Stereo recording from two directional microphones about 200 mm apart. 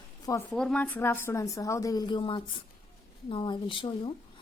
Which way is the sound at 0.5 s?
5° left (ahead or behind).